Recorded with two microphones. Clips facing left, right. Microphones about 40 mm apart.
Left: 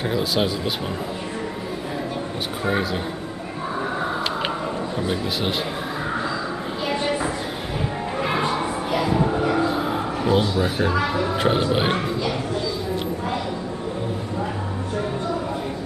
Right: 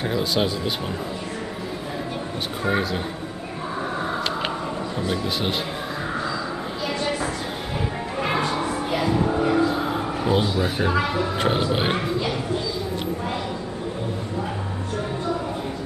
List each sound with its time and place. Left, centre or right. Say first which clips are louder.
0.0 s speech: left 1 dB; centre
2.6 s speech: even; centre
5.0 s speech: even; centre
8.4 s a sound: left 2 dB; centre
8.9 s music: left 1 dB; centre
9.8 s a man's voice: left 1 dB; centre